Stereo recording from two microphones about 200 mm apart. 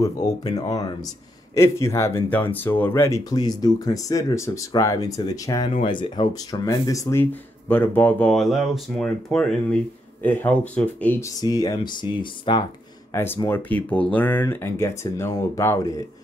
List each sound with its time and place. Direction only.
0.0 s speech: 20° left (ahead or behind)
13.1 s speech: 10° left (ahead or behind)